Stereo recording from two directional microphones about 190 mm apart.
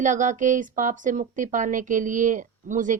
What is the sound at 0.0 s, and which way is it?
Speech, 40° right (ahead or behind).